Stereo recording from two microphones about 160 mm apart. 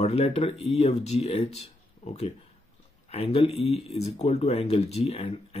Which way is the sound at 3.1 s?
40° left (ahead or behind).